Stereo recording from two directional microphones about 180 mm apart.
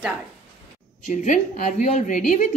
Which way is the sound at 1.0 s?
40° left (ahead or behind).